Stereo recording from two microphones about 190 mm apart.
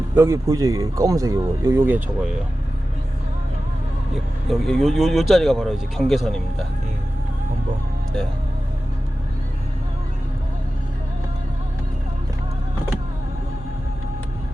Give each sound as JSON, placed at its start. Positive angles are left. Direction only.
{"t": 0.2, "sound": "speech", "side_deg": -15}
{"t": 4.4, "sound": "speech", "side_deg": 0}